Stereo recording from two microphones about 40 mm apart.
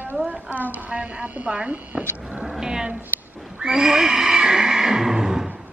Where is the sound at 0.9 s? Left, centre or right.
Right.